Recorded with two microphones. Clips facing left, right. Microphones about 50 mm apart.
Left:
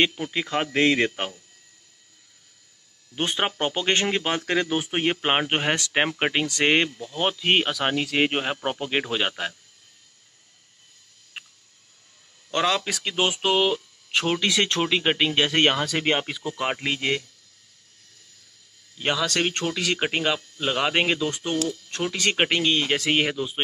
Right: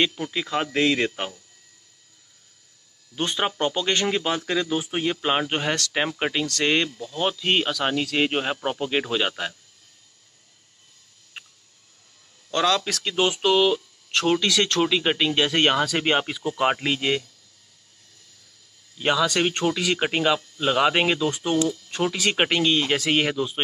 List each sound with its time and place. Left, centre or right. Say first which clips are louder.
0.0 s speech: left 1 dB; centre
3.2 s speech: right 1 dB; left
4.5 s speech: left 1 dB; left; by 9.6 s centre
11.4 s a sound: left 1 dB; centre
12.4 s speech: right 1 dB; left; by 16.3 s centre
16.7 s speech: right 2 dB; centre
18.9 s speech: right 3 dB; centre
19.6 s speech: right 4 dB; right
20.0 s speech: right 2 dB; centre